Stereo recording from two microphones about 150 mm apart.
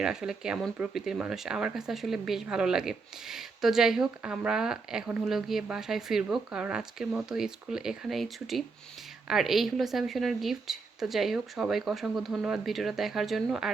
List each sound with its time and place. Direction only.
0.0 s speech: 5° right (ahead or behind)